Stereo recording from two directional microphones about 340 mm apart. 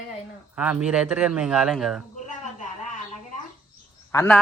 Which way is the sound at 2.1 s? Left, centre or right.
Left.